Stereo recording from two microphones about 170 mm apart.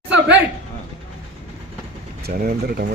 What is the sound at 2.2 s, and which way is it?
Speech, 60° right (ahead or behind).